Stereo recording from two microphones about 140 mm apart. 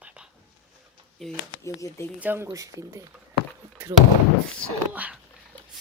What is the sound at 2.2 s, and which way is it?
Speech, 15° right (ahead or behind).